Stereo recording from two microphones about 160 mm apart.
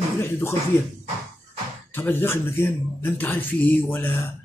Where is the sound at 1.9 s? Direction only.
10° left (ahead or behind).